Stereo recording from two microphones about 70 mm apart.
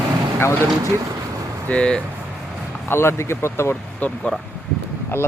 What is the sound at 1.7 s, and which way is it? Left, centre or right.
Speech, centre.